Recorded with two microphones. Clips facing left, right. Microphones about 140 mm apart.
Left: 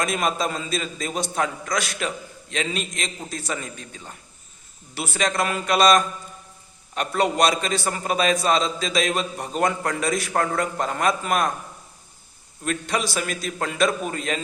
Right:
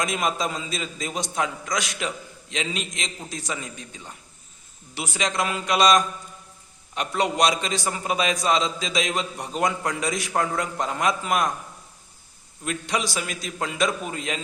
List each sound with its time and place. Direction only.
0.0 s a man's voice: 15° right (ahead or behind)
12.6 s a man's voice: 15° right (ahead or behind)